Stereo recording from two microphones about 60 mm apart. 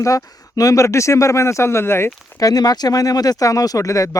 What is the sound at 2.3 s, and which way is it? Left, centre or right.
Speech, left.